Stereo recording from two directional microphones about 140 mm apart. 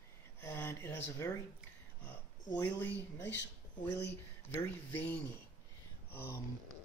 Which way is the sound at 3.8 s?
15° left (ahead or behind).